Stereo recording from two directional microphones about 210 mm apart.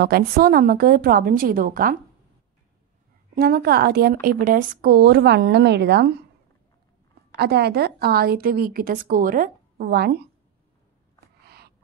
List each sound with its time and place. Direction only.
0.0 s speech: 45° right (ahead or behind)
3.3 s speech: 45° right (ahead or behind)
7.3 s speech: 50° right (ahead or behind)
11.4 s a sound: 50° right (ahead or behind)